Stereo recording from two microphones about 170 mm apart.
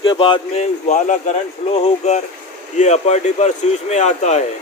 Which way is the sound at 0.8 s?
45° left (ahead or behind).